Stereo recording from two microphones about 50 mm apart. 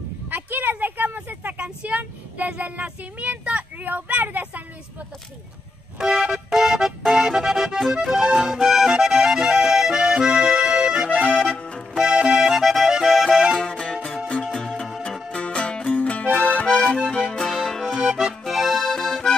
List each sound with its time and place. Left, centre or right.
0.3 s speech: right
5.9 s music: centre
11.5 s accordion: left
11.9 s accordion: centre
12.4 s music: centre
12.9 s accordion: centre
13.3 s music: centre
13.6 s music: centre
14.5 s music: centre
15.9 s music: left
16.3 s accordion: left
17.3 s music: centre
17.6 s accordion: centre
18.0 s accordion: centre